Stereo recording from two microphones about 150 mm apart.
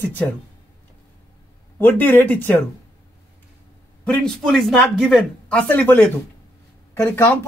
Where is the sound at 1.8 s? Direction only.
15° left (ahead or behind).